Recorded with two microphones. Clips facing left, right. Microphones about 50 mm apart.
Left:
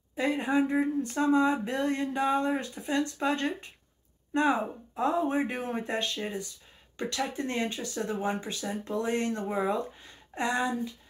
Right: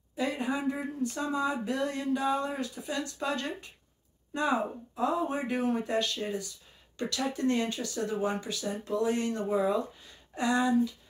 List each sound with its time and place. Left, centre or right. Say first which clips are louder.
0.1 s speech: left 4 dB; left